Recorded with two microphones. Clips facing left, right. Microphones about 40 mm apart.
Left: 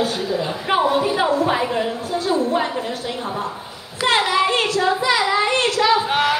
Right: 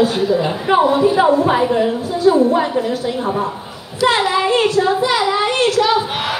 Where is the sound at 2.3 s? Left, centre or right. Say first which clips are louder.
Right 2 dB; right.